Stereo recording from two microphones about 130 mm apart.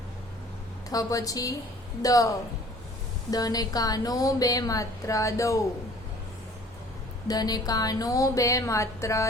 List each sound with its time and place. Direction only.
0.9 s speech: 25° left (ahead or behind)
3.3 s speech: 30° left (ahead or behind)
7.3 s speech: 30° left (ahead or behind)